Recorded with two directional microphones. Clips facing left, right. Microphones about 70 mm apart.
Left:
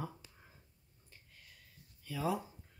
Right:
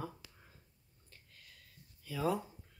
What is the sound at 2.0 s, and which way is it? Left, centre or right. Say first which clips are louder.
Speech: right 1 dB; centre.